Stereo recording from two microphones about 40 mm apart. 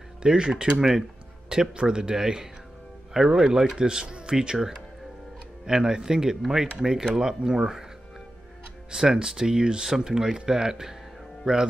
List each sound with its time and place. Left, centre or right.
0.2 s speech: right
8.9 s speech: centre